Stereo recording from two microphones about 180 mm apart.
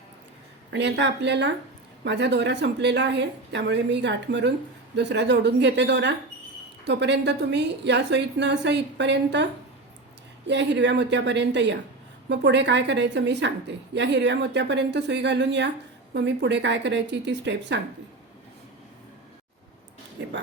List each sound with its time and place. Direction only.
0.7 s a woman's voice: 75° right (ahead or behind)